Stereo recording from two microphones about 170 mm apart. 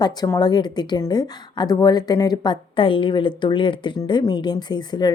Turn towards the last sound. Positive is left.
turn(degrees=25)  # may be behind; listen again after turning